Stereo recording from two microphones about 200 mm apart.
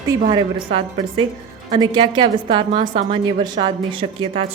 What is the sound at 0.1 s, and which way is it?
A woman's voice, 20° right (ahead or behind).